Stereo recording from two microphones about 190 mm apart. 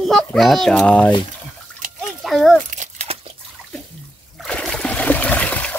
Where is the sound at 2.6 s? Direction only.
35° right (ahead or behind).